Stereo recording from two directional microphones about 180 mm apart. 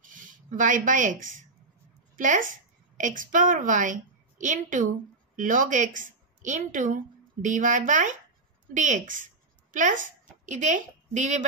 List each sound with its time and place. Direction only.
0.0 s a woman's voice: 45° right (ahead or behind)